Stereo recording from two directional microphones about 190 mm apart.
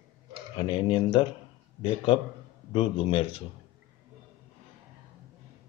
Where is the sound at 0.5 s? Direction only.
25° left (ahead or behind).